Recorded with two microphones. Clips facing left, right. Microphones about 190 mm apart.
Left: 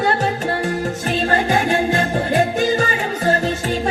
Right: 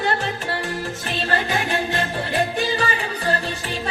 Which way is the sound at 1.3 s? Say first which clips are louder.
Left 5 dB; 45° left (ahead or behind).